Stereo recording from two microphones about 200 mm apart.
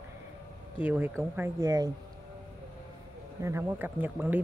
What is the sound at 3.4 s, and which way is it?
A woman's voice, 15° right (ahead or behind).